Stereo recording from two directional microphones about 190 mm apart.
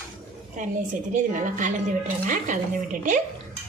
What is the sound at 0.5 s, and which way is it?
A woman's voice, 45° right (ahead or behind).